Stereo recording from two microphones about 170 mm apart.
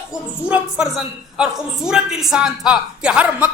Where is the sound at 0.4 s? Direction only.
5° right (ahead or behind).